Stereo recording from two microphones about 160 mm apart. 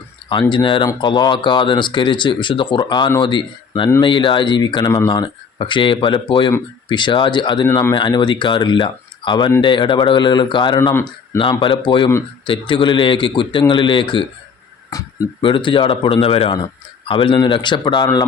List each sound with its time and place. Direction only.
0.5 s speech: 30° left (ahead or behind)
7.7 s speech: 15° left (ahead or behind)
7.9 s speech: 30° left (ahead or behind)
11.3 s speech: 30° left (ahead or behind)